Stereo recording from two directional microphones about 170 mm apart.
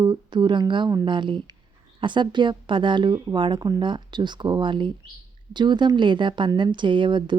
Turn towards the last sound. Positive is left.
turn(degrees=-25)  # may be behind; listen again after turning